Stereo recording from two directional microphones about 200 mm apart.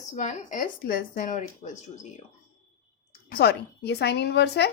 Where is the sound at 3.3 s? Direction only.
55° left (ahead or behind).